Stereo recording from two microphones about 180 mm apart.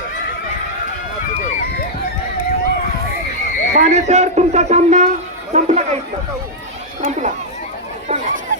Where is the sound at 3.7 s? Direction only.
40° right (ahead or behind).